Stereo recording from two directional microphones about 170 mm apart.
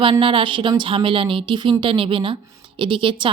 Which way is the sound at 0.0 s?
30° right (ahead or behind).